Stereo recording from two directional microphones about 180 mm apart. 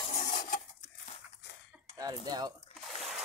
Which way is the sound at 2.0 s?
20° right (ahead or behind).